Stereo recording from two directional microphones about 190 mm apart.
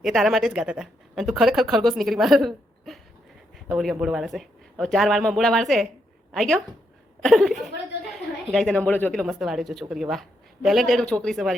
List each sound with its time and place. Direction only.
0.0 s speech: centre (ahead or behind)
7.2 s chuckle: centre (ahead or behind)
8.5 s speech: 5° left (ahead or behind)